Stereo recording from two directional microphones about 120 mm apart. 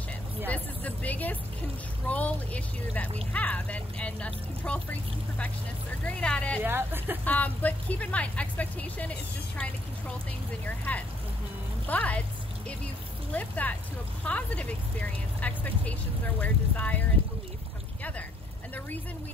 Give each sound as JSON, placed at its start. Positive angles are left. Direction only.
{"t": 0.5, "sound": "vehicle", "side_deg": 15}
{"t": 2.0, "sound": "speech", "side_deg": 10}
{"t": 6.0, "sound": "speech", "side_deg": 10}
{"t": 6.6, "sound": "speech", "side_deg": -15}
{"t": 7.2, "sound": "speech", "side_deg": 15}
{"t": 10.6, "sound": "speech", "side_deg": 15}
{"t": 13.3, "sound": "speech", "side_deg": 15}